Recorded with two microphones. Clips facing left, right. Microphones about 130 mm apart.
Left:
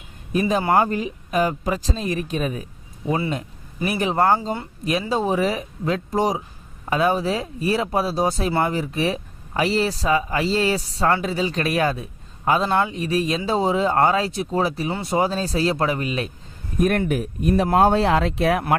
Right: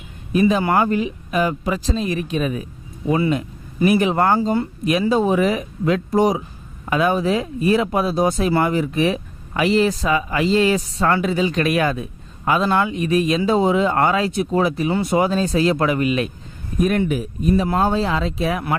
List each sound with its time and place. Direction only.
0.3 s speech: 40° left (ahead or behind)
16.8 s speech: 50° left (ahead or behind)